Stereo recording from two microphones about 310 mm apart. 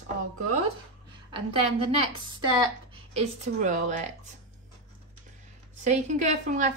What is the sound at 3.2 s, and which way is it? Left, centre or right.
Speech, right.